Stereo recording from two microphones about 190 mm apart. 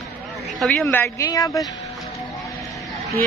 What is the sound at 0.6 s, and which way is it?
Speech, centre (ahead or behind).